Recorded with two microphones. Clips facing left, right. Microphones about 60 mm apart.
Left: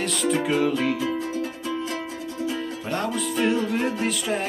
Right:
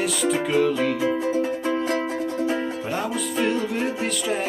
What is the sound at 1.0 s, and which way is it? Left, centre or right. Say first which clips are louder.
Music: right 5 dB; right.